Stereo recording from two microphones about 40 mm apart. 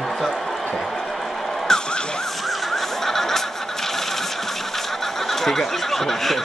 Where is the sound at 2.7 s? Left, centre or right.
Centre.